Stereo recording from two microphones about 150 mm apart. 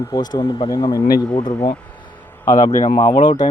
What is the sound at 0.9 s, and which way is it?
Speech, 90° left.